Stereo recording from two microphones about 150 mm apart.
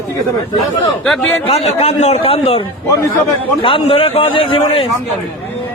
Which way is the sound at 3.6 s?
35° left (ahead or behind).